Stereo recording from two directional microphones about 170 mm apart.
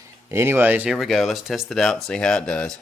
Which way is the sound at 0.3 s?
15° right (ahead or behind).